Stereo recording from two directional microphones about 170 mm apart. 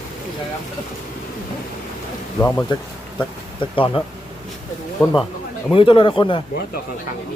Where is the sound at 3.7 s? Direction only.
30° left (ahead or behind).